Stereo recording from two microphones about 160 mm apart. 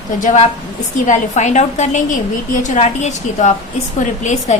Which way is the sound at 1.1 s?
50° left (ahead or behind).